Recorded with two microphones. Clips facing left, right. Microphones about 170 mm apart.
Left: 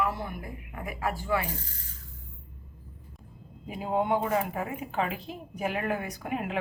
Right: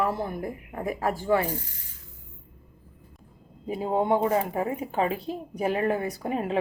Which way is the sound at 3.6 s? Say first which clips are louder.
Right 3 dB; 35° right (ahead or behind).